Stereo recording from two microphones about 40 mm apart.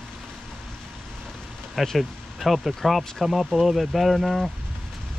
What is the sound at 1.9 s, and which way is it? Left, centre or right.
Speech, centre.